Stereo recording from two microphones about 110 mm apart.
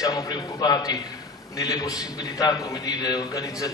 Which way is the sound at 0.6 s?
35° left (ahead or behind).